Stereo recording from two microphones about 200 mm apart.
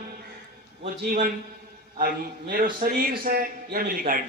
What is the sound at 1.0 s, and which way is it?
Speech, 45° right (ahead or behind).